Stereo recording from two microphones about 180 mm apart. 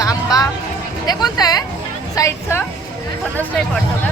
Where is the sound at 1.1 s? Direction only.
20° left (ahead or behind).